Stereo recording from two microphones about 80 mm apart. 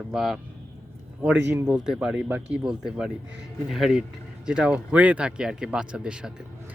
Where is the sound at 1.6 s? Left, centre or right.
Centre.